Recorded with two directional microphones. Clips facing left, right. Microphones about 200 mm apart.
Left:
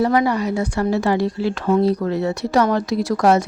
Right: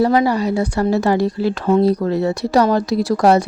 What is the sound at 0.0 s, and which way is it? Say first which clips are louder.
A woman's voice: right 2 dB; 30° right (ahead or behind).